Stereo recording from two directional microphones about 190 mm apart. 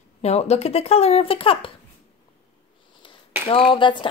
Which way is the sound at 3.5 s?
25° left (ahead or behind).